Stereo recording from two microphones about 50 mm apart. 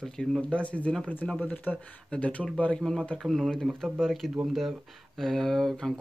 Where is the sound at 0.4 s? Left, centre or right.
Left.